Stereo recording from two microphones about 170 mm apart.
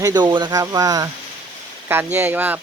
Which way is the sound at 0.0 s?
25° right (ahead or behind).